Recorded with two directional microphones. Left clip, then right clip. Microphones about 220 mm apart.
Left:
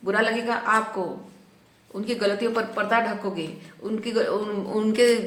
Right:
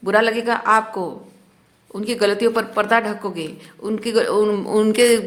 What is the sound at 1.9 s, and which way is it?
Speech, 40° right (ahead or behind).